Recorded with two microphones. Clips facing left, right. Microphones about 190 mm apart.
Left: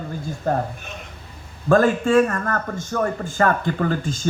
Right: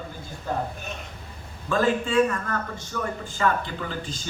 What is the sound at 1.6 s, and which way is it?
A man's voice, 50° left (ahead or behind).